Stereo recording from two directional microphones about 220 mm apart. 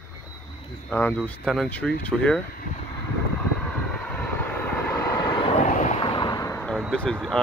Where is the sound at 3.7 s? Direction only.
5° left (ahead or behind); by 6.1 s 35° left (ahead or behind).